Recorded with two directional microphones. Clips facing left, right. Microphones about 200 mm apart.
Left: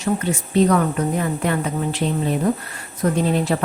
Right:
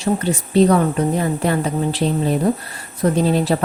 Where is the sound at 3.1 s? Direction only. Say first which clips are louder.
Right 3 dB; 35° right (ahead or behind).